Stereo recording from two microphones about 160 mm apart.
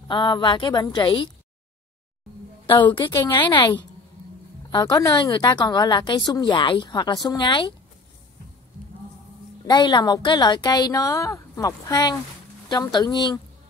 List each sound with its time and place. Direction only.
0.1 s a woman's voice: 30° left (ahead or behind)
2.6 s a woman's voice: 30° left (ahead or behind)
9.7 s a woman's voice: 25° left (ahead or behind)